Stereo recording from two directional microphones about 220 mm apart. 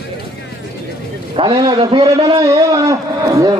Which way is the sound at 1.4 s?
20° right (ahead or behind).